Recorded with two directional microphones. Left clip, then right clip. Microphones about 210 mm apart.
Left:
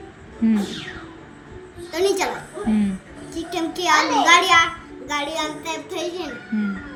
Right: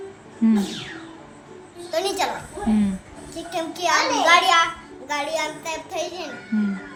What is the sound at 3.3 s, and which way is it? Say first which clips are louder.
A child's voice: left 2 dB; 10° right (ahead or behind).